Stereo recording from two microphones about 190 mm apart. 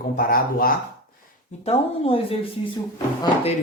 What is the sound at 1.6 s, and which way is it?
Speech, 30° left (ahead or behind).